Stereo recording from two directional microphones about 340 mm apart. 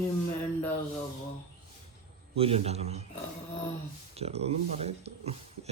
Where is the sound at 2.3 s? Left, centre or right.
Centre.